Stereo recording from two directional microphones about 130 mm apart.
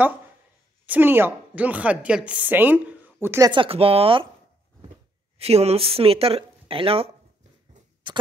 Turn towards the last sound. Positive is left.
turn(degrees=-45)  # may be behind; listen again after turning